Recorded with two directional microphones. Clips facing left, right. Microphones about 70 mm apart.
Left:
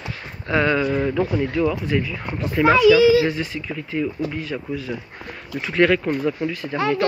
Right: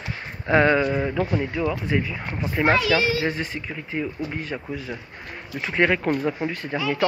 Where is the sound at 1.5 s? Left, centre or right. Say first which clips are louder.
Left 4 dB; centre.